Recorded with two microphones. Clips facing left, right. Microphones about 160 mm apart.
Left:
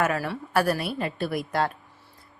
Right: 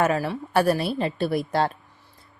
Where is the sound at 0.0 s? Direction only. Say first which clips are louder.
Right 3 dB; 25° right (ahead or behind).